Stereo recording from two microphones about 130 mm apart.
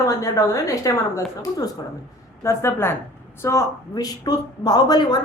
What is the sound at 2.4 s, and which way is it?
A woman's voice, 20° left (ahead or behind).